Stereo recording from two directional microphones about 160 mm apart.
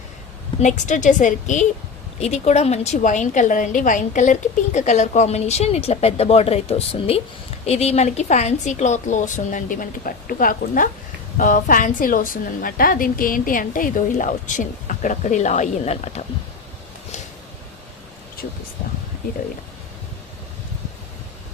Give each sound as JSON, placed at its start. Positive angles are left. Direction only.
{"t": 0.6, "sound": "a woman's voice", "side_deg": 50}